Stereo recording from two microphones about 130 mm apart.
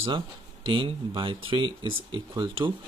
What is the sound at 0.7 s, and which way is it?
Speech, 40° right (ahead or behind).